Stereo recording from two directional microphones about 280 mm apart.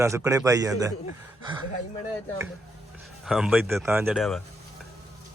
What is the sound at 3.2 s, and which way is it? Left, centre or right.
A man's voice, centre.